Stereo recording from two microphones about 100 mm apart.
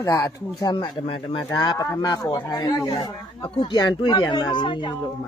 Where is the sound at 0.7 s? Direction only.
60° left (ahead or behind).